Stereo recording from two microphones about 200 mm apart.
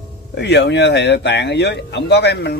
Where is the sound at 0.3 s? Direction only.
60° left (ahead or behind).